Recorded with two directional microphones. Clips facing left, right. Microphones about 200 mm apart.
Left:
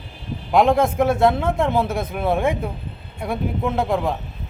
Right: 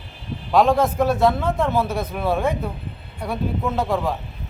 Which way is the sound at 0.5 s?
20° left (ahead or behind).